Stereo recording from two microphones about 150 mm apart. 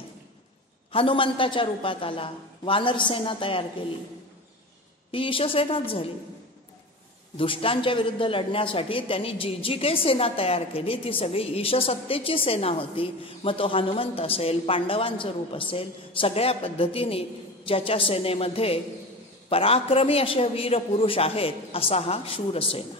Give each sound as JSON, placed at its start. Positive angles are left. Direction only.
{"t": 0.9, "sound": "a man's voice", "side_deg": 35}
{"t": 5.1, "sound": "a man's voice", "side_deg": 35}
{"t": 7.3, "sound": "a man's voice", "side_deg": 40}